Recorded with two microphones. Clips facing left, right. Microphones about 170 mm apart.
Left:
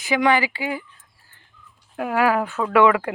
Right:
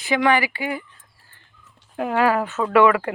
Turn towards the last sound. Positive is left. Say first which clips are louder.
# right 1 dB
turn(degrees=15)  # may be behind; listen again after turning